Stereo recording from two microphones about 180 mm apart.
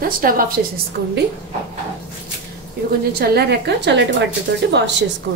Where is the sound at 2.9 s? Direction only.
65° right (ahead or behind).